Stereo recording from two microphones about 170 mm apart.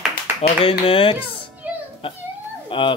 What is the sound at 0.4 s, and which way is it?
Speech, 30° left (ahead or behind).